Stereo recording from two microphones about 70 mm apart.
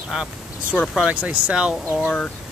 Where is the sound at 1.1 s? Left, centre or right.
Centre.